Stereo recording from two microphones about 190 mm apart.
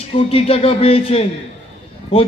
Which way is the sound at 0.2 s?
30° left (ahead or behind).